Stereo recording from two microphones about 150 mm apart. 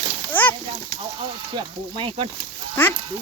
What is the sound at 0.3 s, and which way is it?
Splash, 10° left (ahead or behind).